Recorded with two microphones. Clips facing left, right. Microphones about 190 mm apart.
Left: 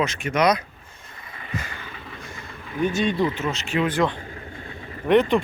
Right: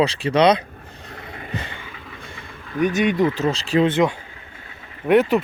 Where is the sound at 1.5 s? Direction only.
30° right (ahead or behind).